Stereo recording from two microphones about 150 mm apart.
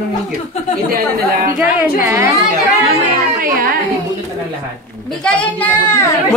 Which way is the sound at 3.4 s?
70° right (ahead or behind).